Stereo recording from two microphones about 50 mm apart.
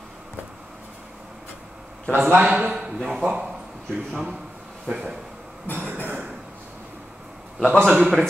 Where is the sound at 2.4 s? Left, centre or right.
Centre.